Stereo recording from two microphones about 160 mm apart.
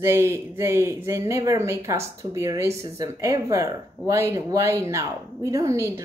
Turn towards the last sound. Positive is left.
turn(degrees=-20)  # may be behind; listen again after turning